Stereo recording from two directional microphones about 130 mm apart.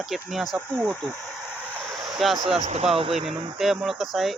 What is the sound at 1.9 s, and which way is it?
Vehicle, centre (ahead or behind).